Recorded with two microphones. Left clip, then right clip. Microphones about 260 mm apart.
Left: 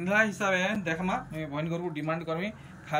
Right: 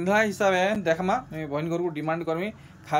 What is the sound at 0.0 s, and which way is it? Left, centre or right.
Speech, right.